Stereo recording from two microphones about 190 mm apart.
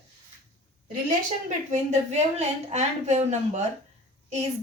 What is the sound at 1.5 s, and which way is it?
Speech, 40° right (ahead or behind).